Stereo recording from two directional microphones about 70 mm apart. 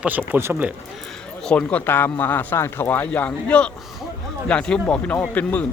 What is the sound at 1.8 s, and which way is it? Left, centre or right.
Speech, left.